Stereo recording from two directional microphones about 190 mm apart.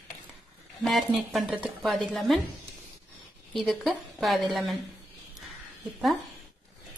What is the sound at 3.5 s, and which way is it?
A woman's voice, centre (ahead or behind).